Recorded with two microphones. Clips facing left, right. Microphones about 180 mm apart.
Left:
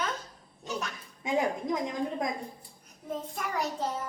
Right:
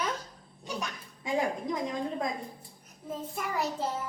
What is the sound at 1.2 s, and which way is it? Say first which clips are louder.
Dishes: left 1 dB; 20° left (ahead or behind).